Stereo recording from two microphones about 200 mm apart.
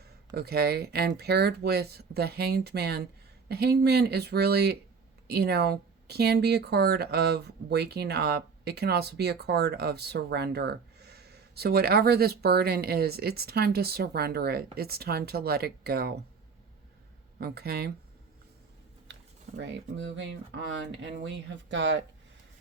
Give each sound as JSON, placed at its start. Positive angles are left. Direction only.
{"t": 0.3, "sound": "speech", "side_deg": -50}
{"t": 17.3, "sound": "speech", "side_deg": -55}
{"t": 19.5, "sound": "speech", "side_deg": -65}